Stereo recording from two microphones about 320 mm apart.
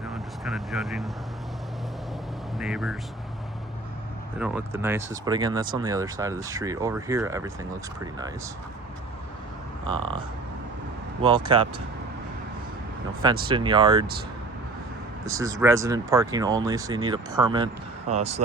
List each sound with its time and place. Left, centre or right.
0.1 s speech: centre
2.6 s speech: centre
4.4 s speech: centre
9.8 s speech: right
11.2 s speech: centre
13.5 s speech: centre
15.3 s speech: centre